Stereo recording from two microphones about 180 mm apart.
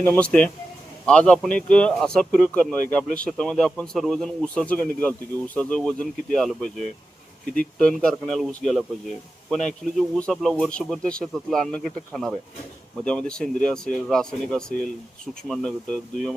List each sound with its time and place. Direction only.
0.0 s a man's voice: 10° left (ahead or behind)